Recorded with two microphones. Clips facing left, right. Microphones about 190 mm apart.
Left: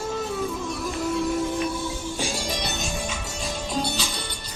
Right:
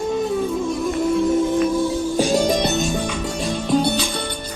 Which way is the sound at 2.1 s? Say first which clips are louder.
Right 12 dB; 40° right (ahead or behind).